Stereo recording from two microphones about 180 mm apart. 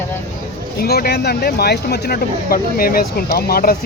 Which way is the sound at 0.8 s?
60° left (ahead or behind).